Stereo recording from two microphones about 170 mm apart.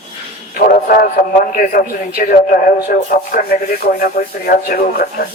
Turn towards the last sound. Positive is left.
turn(degrees=65)  # may be behind; listen again after turning